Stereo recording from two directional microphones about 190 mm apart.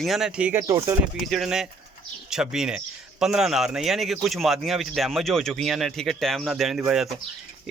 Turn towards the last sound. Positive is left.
turn(degrees=0)  # may be behind; listen again after turning